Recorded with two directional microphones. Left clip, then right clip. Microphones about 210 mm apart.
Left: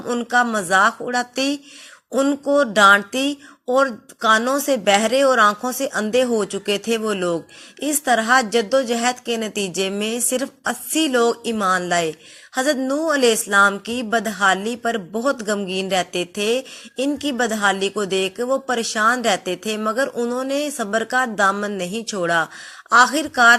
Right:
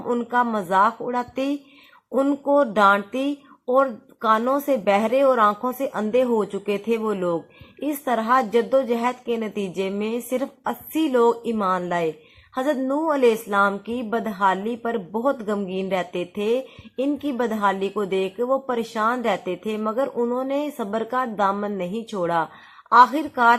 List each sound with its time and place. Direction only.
0.1 s speech: 5° left (ahead or behind)
6.2 s speech: 30° left (ahead or behind)
6.7 s speech: 10° left (ahead or behind)